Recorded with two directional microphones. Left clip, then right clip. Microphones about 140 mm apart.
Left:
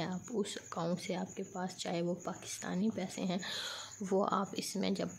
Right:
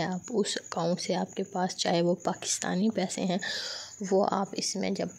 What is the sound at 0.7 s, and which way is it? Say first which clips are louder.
Speech: right 8 dB; 35° right (ahead or behind).